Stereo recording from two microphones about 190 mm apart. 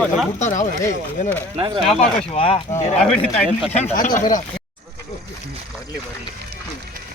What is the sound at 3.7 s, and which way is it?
Speech, 40° left (ahead or behind).